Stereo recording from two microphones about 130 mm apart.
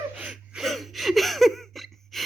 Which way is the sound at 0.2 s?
5° right (ahead or behind).